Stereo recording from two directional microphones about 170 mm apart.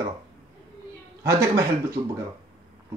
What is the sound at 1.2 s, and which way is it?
Speech, 15° right (ahead or behind).